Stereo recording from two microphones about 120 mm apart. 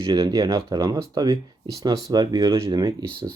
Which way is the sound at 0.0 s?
35° right (ahead or behind).